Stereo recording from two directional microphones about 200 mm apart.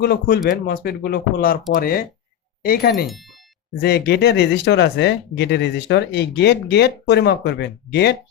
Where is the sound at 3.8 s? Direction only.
55° left (ahead or behind).